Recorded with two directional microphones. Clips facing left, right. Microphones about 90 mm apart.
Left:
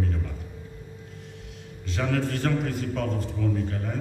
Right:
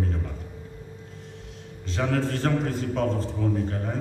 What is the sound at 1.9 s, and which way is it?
A man's voice, 35° right (ahead or behind).